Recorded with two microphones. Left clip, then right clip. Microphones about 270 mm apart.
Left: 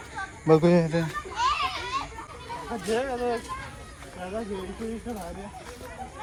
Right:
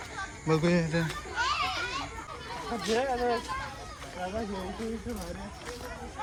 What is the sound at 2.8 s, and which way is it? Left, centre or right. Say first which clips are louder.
Speech: left 1 dB; left.